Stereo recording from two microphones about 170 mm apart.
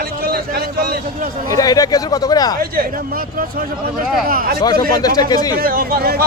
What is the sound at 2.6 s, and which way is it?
A man's voice, 60° right (ahead or behind).